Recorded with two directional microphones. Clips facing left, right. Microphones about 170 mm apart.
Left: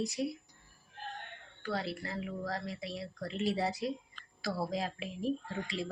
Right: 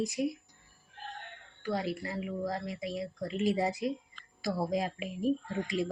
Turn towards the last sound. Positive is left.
turn(degrees=-15)  # may be behind; listen again after turning